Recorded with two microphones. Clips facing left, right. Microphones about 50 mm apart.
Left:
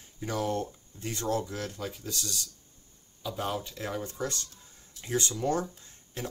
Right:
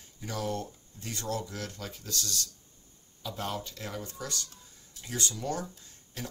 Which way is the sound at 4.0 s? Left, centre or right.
Left.